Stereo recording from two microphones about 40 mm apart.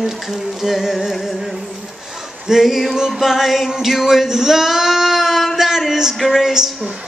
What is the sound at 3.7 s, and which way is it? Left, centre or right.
Speech, centre.